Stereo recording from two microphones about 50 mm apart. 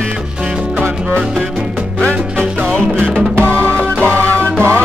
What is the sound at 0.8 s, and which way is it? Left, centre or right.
Music, centre.